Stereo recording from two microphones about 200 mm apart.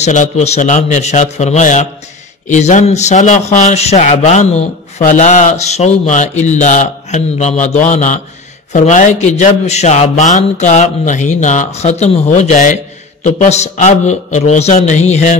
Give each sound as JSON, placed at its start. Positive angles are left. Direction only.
{"t": 0.0, "sound": "speech", "side_deg": 35}